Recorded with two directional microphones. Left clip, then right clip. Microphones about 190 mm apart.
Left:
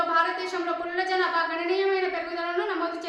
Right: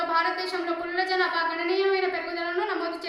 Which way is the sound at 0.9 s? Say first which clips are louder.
Even; 15° right (ahead or behind).